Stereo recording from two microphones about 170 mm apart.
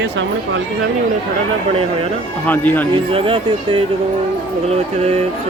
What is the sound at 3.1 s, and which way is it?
Speech, 30° right (ahead or behind).